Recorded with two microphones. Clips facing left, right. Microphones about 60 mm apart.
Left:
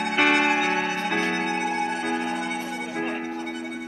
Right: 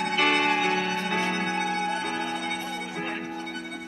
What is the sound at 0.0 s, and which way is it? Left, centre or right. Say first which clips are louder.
Music: left 3 dB; left.